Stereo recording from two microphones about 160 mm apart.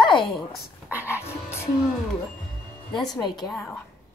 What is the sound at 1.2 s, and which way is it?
Music, 15° left (ahead or behind).